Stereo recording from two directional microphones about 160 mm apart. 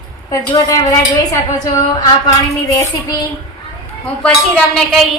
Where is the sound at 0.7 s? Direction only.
20° left (ahead or behind).